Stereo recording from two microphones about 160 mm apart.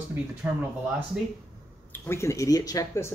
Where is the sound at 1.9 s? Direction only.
15° left (ahead or behind).